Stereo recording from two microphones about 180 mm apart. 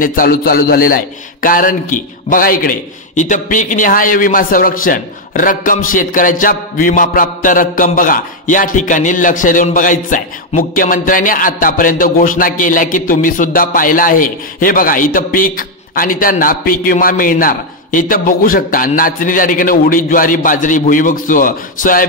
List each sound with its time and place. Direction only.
0.0 s a man's voice: 50° left (ahead or behind)